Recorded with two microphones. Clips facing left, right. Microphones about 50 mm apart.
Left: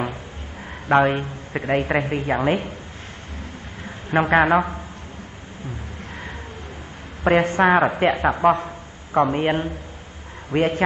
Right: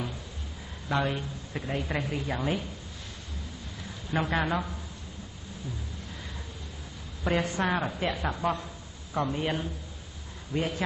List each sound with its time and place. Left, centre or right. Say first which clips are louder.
0.8 s speech: left 12 dB; left
3.8 s a man's voice: left 10 dB; left
7.2 s a woman's voice: left 11 dB; left